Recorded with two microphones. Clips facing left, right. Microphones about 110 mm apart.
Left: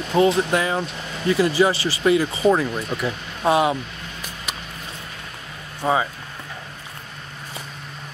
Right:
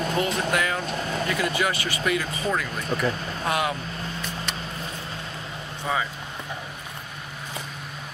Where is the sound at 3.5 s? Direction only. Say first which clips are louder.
Left 8 dB; 25° left (ahead or behind).